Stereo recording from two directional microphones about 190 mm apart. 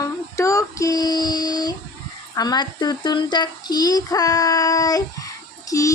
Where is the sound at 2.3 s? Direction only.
20° left (ahead or behind).